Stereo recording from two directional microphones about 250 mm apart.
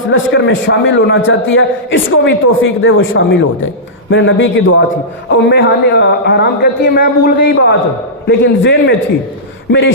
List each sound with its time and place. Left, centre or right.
0.1 s a man's voice: left